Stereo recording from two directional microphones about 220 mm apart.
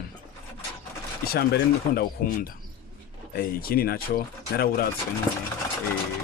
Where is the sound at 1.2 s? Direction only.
45° left (ahead or behind).